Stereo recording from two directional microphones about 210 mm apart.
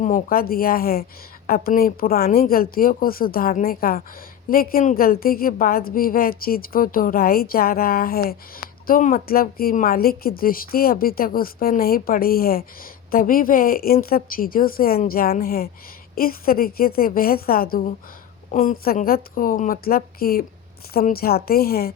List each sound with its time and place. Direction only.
0.0 s a woman's voice: 40° left (ahead or behind)